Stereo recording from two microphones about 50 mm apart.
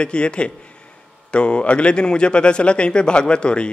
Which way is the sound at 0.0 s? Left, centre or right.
Left.